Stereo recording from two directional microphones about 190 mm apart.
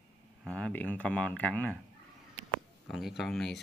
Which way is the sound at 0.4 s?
5° left (ahead or behind).